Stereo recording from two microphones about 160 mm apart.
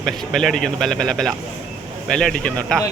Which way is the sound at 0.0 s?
Centre (ahead or behind).